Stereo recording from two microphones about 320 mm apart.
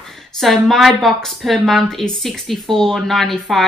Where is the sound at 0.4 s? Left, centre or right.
Centre.